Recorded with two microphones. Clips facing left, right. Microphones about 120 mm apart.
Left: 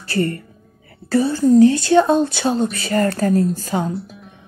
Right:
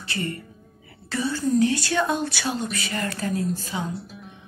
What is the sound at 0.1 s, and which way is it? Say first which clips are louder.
Speech: left 10 dB; 45° left (ahead or behind).